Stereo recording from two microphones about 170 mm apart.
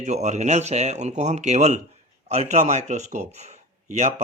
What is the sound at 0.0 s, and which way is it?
Speech, 45° right (ahead or behind).